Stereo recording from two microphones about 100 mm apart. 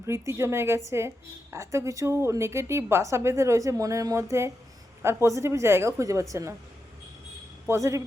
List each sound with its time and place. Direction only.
0.0 s a woman's voice: 25° right (ahead or behind)
7.7 s a woman's voice: 30° right (ahead or behind)